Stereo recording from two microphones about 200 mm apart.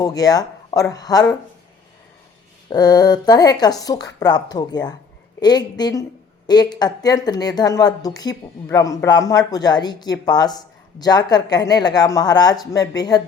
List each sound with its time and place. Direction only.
0.0 s a woman's voice: 20° left (ahead or behind)
2.6 s a woman's voice: 20° left (ahead or behind)